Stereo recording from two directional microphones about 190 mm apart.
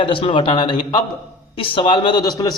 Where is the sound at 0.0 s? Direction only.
30° left (ahead or behind).